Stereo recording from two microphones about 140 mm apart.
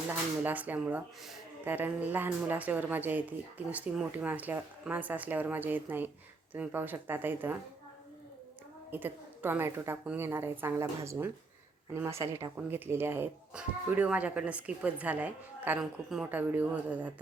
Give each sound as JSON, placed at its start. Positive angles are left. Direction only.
{"t": 0.1, "sound": "speech", "side_deg": -10}
{"t": 8.9, "sound": "speech", "side_deg": -15}
{"t": 12.5, "sound": "a woman's voice", "side_deg": -15}
{"t": 16.3, "sound": "speech", "side_deg": -15}